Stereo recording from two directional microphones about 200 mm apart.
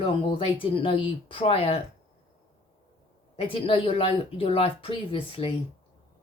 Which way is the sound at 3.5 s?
25° left (ahead or behind).